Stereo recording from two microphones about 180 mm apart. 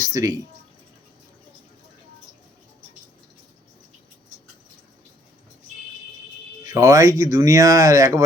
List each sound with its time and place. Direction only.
0.0 s speech: 20° right (ahead or behind)
6.7 s speech: 15° right (ahead or behind)